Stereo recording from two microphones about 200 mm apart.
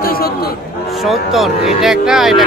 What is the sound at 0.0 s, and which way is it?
Chatter, 50° left (ahead or behind).